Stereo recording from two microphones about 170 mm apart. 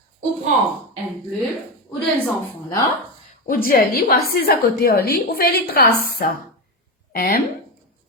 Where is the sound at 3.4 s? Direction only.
55° left (ahead or behind).